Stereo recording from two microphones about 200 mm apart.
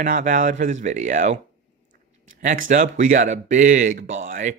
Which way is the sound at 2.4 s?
40° right (ahead or behind).